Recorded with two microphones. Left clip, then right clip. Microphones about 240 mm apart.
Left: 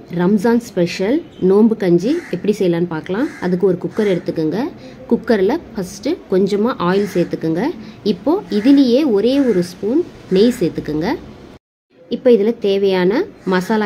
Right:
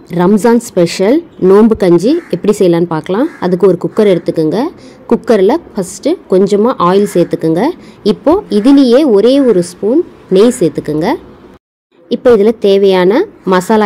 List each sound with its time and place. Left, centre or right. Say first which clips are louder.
0.1 s a woman's voice: right 7 dB; right